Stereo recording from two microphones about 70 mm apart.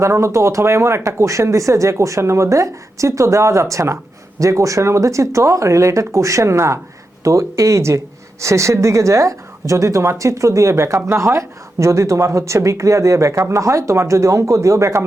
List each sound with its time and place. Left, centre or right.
0.0 s speech: right